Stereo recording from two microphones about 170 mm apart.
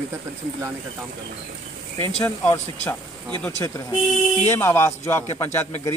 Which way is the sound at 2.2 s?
15° left (ahead or behind).